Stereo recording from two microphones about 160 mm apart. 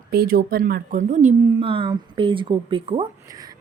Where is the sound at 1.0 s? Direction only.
50° right (ahead or behind).